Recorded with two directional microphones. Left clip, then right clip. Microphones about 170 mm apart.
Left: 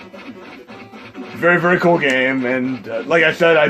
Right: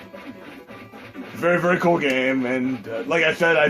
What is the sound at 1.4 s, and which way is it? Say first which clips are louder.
A man's voice: left 5 dB; 45° left (ahead or behind).